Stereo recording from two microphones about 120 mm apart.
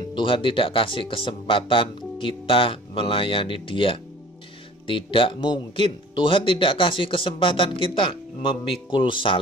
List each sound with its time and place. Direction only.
0.1 s speech: 45° left (ahead or behind)